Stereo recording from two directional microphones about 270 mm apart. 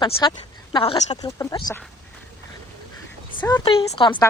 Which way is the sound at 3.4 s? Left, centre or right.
Centre.